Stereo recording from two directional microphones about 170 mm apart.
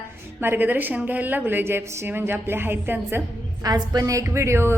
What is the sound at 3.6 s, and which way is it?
A woman's voice, 25° right (ahead or behind).